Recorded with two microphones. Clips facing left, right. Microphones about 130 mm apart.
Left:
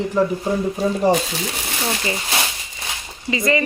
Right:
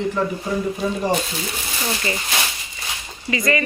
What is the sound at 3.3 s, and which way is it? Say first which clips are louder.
Speech: left 2 dB; 25° left (ahead or behind).